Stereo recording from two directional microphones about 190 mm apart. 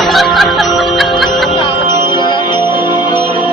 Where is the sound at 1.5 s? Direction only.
25° left (ahead or behind).